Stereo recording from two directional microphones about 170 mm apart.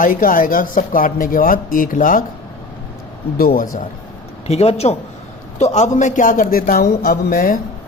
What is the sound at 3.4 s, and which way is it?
Speech, 55° left (ahead or behind).